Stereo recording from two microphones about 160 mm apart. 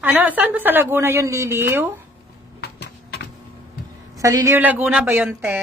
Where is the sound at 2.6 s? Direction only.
90° left.